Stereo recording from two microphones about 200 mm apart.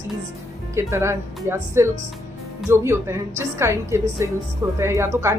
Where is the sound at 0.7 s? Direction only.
15° right (ahead or behind).